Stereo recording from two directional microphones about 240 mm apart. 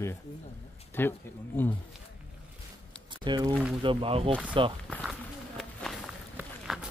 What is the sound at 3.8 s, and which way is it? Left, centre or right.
Speech, right.